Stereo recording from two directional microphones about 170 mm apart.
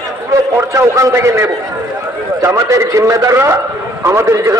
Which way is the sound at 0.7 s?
20° right (ahead or behind).